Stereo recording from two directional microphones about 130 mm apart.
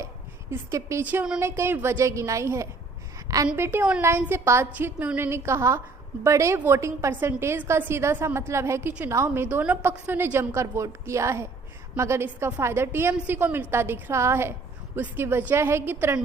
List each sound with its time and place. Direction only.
0.5 s a woman's voice: 20° right (ahead or behind)
3.5 s a woman's voice: 15° right (ahead or behind)